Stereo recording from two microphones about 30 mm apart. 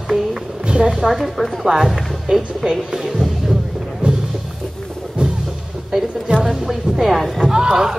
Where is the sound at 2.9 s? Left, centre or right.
Centre.